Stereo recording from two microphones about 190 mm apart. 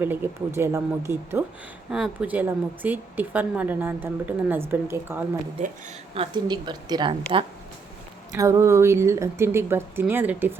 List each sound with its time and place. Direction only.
0.0 s a woman's voice: 10° right (ahead or behind)
6.1 s a woman's voice: 25° right (ahead or behind)